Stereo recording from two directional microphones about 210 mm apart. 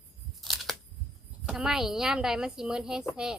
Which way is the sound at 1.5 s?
5° right (ahead or behind).